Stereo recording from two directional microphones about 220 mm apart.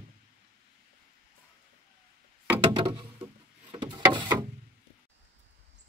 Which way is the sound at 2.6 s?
20° right (ahead or behind).